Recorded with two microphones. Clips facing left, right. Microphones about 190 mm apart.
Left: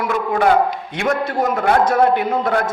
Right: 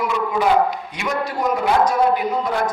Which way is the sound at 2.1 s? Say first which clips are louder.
Left 3 dB; 60° left (ahead or behind).